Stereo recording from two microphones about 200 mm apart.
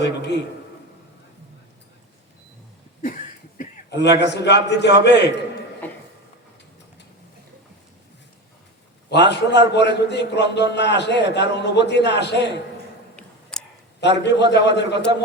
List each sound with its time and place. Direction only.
0.0 s a man's voice: 55° left (ahead or behind)
3.8 s a man's voice: 60° left (ahead or behind)
9.0 s a man's voice: 60° left (ahead or behind)
13.1 s a sound: 5° left (ahead or behind)
14.0 s a man's voice: 60° left (ahead or behind)